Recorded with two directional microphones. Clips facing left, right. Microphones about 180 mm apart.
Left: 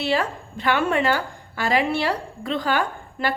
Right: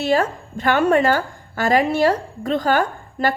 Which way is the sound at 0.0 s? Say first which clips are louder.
Right 4 dB; 45° right (ahead or behind).